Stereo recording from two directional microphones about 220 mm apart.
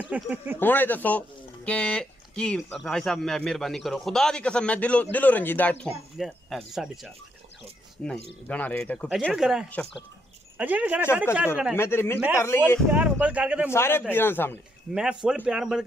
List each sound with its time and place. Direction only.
0.0 s speech: 5° right (ahead or behind)
0.6 s speech: 10° left (ahead or behind)
11.7 s speech: 10° left (ahead or behind)
12.9 s speech: 5° right (ahead or behind)
13.7 s speech: 10° left (ahead or behind)
15.2 s speech: 5° right (ahead or behind)